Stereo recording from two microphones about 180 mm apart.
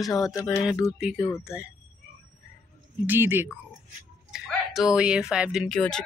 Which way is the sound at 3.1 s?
10° right (ahead or behind).